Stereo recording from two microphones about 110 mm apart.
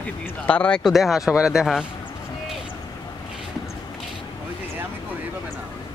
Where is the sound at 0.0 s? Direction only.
10° left (ahead or behind); by 1.9 s 5° right (ahead or behind).